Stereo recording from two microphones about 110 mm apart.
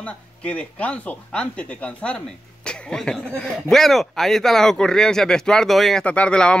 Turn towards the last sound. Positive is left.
turn(degrees=10)  # may be behind; listen again after turning